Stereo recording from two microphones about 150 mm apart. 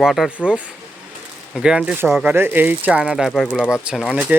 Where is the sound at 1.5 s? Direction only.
5° right (ahead or behind).